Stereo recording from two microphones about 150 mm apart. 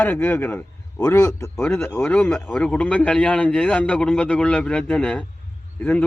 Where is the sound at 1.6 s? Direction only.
10° left (ahead or behind).